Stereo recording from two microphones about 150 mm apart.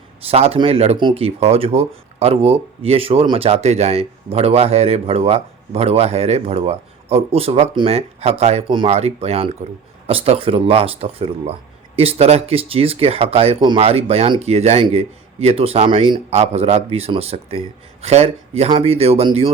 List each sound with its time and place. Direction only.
0.3 s speech: 40° right (ahead or behind)